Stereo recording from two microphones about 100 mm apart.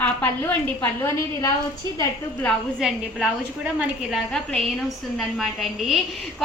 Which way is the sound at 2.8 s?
10° right (ahead or behind).